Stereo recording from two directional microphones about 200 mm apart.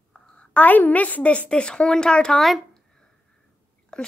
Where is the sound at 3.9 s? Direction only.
5° left (ahead or behind).